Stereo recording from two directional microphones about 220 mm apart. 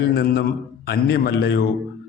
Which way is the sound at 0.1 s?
45° left (ahead or behind).